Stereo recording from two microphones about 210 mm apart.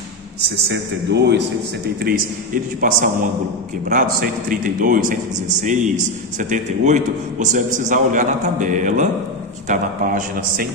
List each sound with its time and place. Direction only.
0.7 s a man's voice: 55° right (ahead or behind)